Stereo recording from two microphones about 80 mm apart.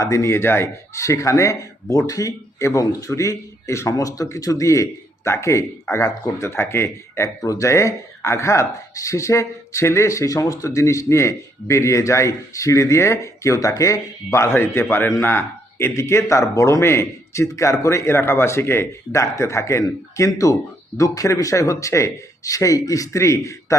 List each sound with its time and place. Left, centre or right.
0.0 s speech: left